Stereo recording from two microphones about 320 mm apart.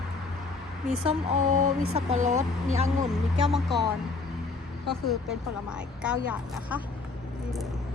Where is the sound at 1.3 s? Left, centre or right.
Right.